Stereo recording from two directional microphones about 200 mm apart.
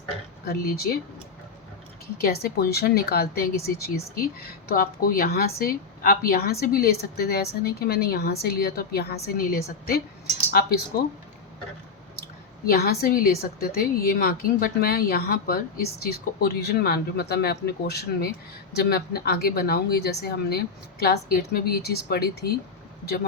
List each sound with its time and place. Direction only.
0.4 s a woman's voice: 50° left (ahead or behind)
2.2 s a woman's voice: 50° left (ahead or behind)
12.6 s a woman's voice: 50° left (ahead or behind)